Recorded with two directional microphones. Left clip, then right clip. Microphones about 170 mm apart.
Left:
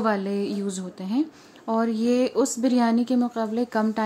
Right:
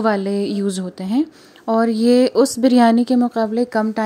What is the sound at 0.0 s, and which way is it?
A woman's voice, 30° right (ahead or behind).